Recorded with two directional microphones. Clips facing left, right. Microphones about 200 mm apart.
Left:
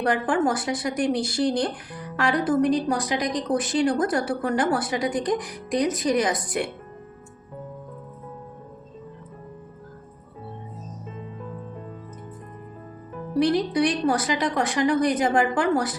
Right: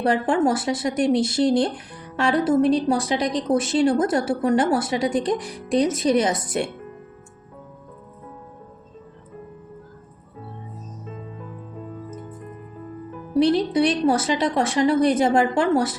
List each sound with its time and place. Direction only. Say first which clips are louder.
0.0 s a woman's voice: right 3 dB; 25° right (ahead or behind)
13.3 s a woman's voice: right 3 dB; 25° right (ahead or behind)